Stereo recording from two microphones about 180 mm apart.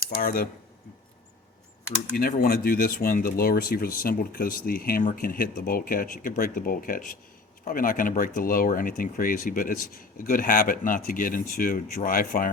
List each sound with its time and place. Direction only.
0.2 s speech: 55° left (ahead or behind)
2.1 s speech: 55° left (ahead or behind)